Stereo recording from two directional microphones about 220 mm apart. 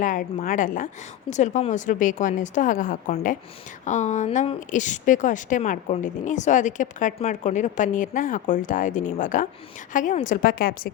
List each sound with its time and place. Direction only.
0.0 s a woman's voice: 35° left (ahead or behind)